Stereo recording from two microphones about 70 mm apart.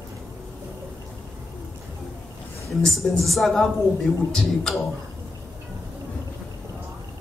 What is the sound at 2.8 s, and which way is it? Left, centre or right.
A man's voice, centre.